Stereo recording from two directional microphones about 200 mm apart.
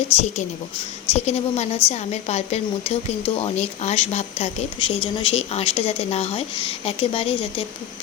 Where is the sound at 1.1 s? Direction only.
35° left (ahead or behind).